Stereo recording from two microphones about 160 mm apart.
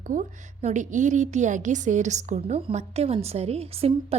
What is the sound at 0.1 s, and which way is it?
A woman's voice, 50° right (ahead or behind).